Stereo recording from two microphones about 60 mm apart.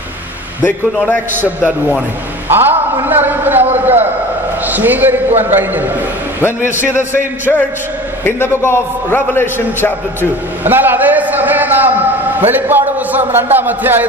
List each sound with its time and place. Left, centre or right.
2.4 s a man's voice: right
6.4 s a man's voice: left
8.2 s a man's voice: left
10.6 s a sound: right
12.4 s a man's voice: right